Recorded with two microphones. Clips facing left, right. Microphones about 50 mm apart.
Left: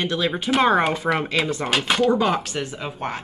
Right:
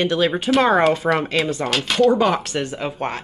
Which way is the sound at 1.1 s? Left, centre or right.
Centre.